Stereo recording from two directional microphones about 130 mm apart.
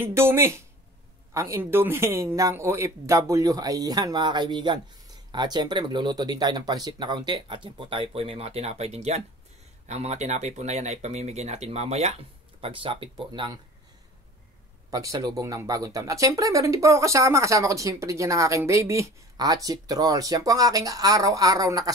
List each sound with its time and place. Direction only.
0.0 s speech: 20° right (ahead or behind); by 13.1 s 40° right (ahead or behind)
13.3 s speech: 30° right (ahead or behind)
14.9 s speech: 25° right (ahead or behind)